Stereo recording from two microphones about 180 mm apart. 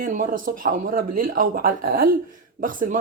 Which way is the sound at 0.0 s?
45° right (ahead or behind).